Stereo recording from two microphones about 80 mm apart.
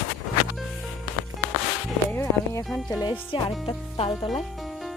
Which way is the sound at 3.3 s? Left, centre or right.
Left.